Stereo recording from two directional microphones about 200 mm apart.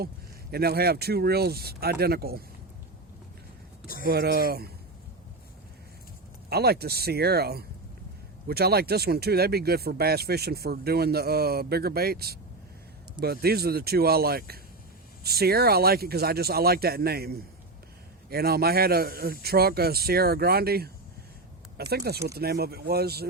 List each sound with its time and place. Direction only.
0.5 s speech: 50° right (ahead or behind)
4.0 s speech: 50° right (ahead or behind)
6.5 s speech: 55° right (ahead or behind)